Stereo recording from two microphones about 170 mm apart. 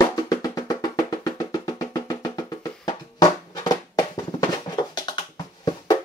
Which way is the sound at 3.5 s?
20° left (ahead or behind).